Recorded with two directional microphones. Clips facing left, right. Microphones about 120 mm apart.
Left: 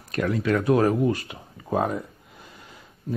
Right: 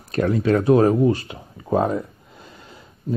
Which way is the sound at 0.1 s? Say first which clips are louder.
Right 5 dB; 30° right (ahead or behind).